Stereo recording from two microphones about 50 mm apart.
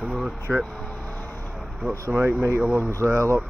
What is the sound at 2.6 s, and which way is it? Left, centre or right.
Speech, right.